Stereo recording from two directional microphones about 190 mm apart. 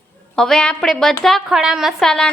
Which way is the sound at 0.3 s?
5° left (ahead or behind).